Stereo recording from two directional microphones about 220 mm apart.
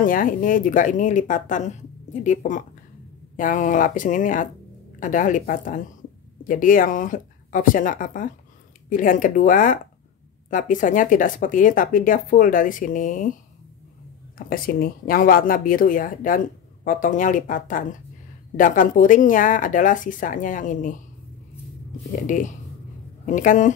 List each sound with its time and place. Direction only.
0.0 s speech: 40° left (ahead or behind)
14.5 s speech: 40° left (ahead or behind)
22.2 s speech: 35° left (ahead or behind)